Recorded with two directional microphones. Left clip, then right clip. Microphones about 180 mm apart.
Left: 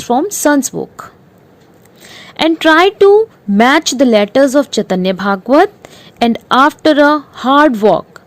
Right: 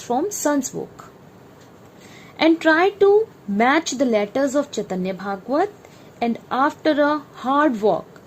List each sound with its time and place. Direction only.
0.0 s a woman's voice: 35° left (ahead or behind)
2.1 s a woman's voice: 40° left (ahead or behind)